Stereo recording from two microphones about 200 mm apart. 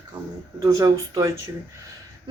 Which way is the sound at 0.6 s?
15° right (ahead or behind).